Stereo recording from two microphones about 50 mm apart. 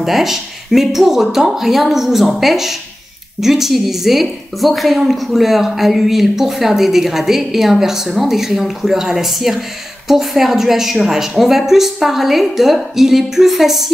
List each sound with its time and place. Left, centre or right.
0.0 s a woman's voice: centre